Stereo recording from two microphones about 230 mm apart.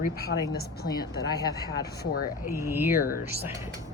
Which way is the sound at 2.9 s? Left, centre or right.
Left.